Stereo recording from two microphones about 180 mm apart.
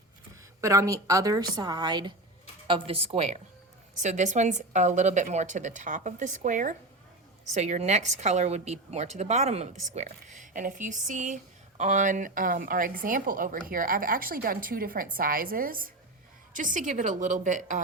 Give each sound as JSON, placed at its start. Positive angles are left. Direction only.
{"t": 0.6, "sound": "a woman's voice", "side_deg": -15}